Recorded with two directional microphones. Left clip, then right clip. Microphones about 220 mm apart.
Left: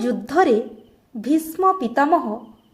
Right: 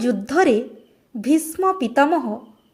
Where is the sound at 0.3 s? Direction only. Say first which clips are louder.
Left 1 dB; 35° right (ahead or behind).